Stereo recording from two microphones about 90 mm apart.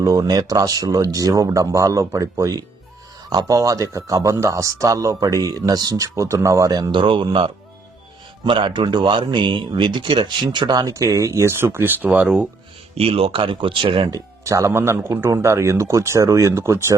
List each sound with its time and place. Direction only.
0.0 s speech: 45° right (ahead or behind)
6.9 s speech: 65° right (ahead or behind)
8.4 s a man's voice: 65° right (ahead or behind); by 12.5 s 10° right (ahead or behind)
13.0 s speech: 90° right; by 14.1 s 70° right (ahead or behind)
14.1 s speech: 35° right (ahead or behind)